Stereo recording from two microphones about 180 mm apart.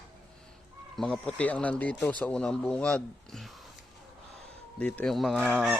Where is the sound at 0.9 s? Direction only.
5° left (ahead or behind).